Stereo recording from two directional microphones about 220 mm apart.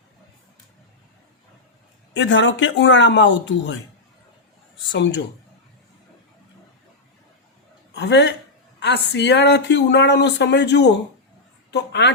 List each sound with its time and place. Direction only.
2.1 s speech: 55° left (ahead or behind)
4.9 s speech: 55° left (ahead or behind)
7.9 s speech: 50° left (ahead or behind)